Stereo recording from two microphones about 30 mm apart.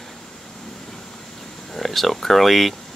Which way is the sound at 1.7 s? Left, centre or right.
Centre.